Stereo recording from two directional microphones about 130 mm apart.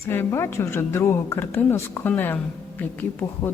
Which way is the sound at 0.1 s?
20° left (ahead or behind).